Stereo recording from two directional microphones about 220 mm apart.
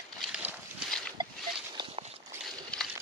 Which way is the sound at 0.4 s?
Centre (ahead or behind).